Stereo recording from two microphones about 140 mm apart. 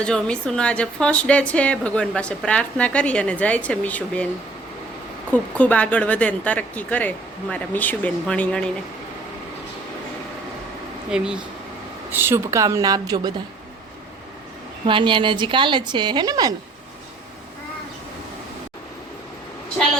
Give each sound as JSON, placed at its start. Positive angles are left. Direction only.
{"t": 0.0, "sound": "a woman's voice", "side_deg": 5}
{"t": 5.3, "sound": "a woman's voice", "side_deg": 10}
{"t": 11.1, "sound": "speech", "side_deg": -5}
{"t": 12.1, "sound": "speech", "side_deg": -15}
{"t": 14.8, "sound": "a woman's voice", "side_deg": -35}